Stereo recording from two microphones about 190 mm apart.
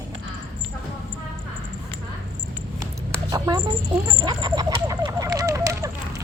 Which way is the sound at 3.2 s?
20° right (ahead or behind).